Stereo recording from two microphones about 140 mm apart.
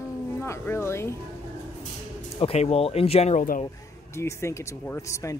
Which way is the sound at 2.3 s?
45° left (ahead or behind).